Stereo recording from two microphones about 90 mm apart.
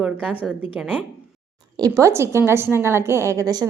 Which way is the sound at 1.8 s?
35° right (ahead or behind).